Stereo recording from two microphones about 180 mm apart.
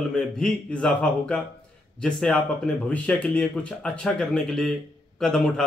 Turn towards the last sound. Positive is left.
turn(degrees=5)  # may be behind; listen again after turning